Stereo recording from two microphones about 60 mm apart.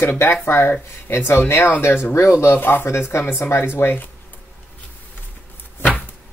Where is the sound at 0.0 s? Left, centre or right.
Left.